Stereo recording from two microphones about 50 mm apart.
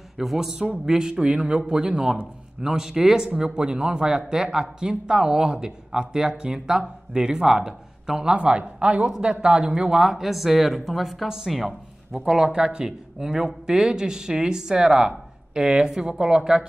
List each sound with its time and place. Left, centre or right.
0.2 s speech: centre